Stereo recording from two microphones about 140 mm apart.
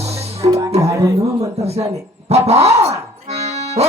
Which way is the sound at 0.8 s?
20° right (ahead or behind).